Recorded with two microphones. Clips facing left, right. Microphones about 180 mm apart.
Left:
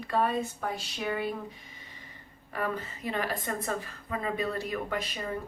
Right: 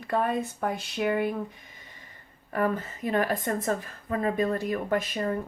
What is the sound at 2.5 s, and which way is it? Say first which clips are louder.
A woman's voice: right 6 dB; 50° right (ahead or behind).